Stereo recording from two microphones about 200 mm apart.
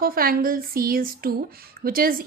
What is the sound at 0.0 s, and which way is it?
A woman's voice, 45° right (ahead or behind).